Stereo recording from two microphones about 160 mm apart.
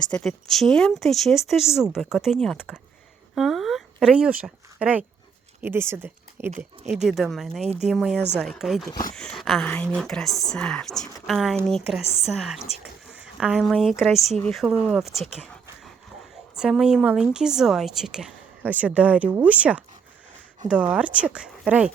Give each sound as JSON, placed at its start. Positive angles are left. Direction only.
{"t": 0.0, "sound": "speech", "side_deg": 5}
{"t": 7.0, "sound": "speech", "side_deg": 0}
{"t": 7.6, "sound": "speech", "side_deg": -40}
{"t": 7.9, "sound": "speech", "side_deg": 0}
{"t": 12.0, "sound": "a woman's voice", "side_deg": 40}
{"t": 12.3, "sound": "speech", "side_deg": 0}
{"t": 16.6, "sound": "speech", "side_deg": -5}